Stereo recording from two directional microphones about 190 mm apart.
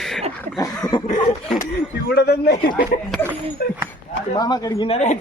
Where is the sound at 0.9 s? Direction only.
25° left (ahead or behind).